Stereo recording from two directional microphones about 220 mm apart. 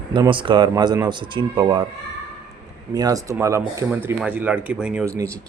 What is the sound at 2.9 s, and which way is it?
Speech, 15° right (ahead or behind).